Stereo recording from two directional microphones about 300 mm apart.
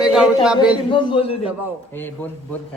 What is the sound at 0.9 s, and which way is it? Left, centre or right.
Speech, centre.